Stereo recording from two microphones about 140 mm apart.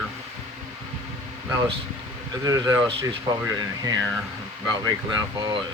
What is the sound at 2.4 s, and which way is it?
Speech, 25° right (ahead or behind).